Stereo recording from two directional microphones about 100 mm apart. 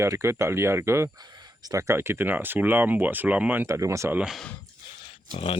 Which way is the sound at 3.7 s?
30° right (ahead or behind).